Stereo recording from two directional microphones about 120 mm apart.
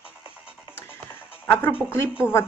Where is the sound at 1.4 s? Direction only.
15° left (ahead or behind).